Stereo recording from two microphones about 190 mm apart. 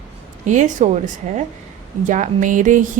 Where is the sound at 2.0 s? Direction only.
40° right (ahead or behind).